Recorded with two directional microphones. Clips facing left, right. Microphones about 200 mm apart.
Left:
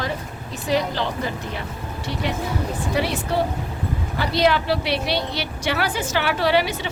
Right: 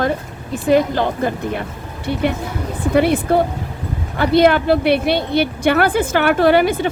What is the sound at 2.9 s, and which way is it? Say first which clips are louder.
A woman's voice: right 11 dB; 55° right (ahead or behind).